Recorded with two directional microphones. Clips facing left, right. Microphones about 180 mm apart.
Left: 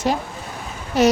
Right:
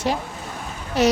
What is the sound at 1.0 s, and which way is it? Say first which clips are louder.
Speech: left 2 dB; 45° left (ahead or behind).